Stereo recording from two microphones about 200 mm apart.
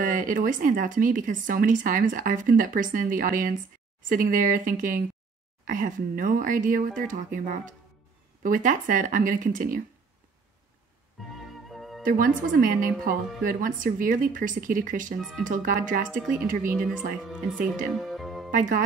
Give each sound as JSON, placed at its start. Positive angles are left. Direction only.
{"t": 0.0, "sound": "a woman's voice", "side_deg": -40}
{"t": 11.7, "sound": "music", "side_deg": 0}
{"t": 12.0, "sound": "a woman's voice", "side_deg": -45}
{"t": 16.9, "sound": "speech", "side_deg": 0}
{"t": 17.9, "sound": "music", "side_deg": 0}
{"t": 18.5, "sound": "speech", "side_deg": -40}